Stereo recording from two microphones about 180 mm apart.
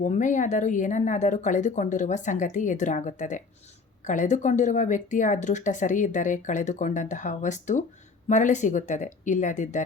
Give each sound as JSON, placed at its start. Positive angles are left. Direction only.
{"t": 0.0, "sound": "speech", "side_deg": 45}